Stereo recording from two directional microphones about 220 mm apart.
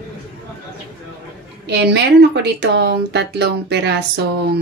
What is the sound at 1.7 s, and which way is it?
Speech, 50° right (ahead or behind).